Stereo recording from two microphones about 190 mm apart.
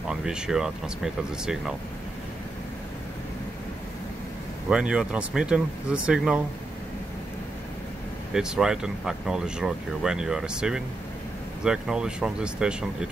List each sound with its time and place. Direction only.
0.1 s speech: 5° right (ahead or behind)
4.6 s speech: 5° right (ahead or behind)
8.3 s speech: 5° right (ahead or behind)